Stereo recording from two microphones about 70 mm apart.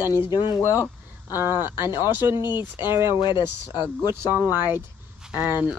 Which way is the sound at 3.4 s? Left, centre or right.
Right.